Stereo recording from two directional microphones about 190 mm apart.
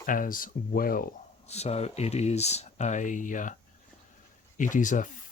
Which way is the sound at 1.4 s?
35° left (ahead or behind).